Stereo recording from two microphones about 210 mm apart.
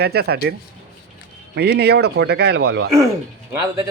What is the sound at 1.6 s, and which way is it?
Speech, 50° right (ahead or behind).